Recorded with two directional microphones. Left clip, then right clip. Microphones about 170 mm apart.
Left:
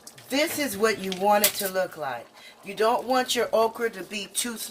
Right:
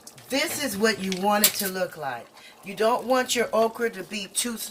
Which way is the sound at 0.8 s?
50° left (ahead or behind).